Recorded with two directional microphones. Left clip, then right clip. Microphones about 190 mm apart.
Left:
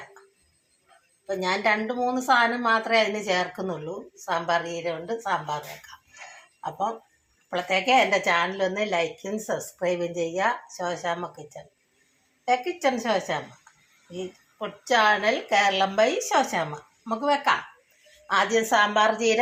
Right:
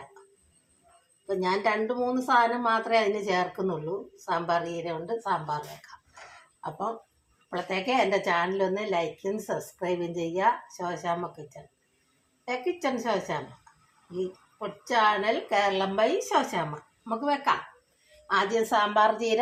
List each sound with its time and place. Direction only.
1.3 s a woman's voice: 15° left (ahead or behind)
6.6 s a woman's voice: 5° left (ahead or behind)
14.6 s a woman's voice: 20° left (ahead or behind)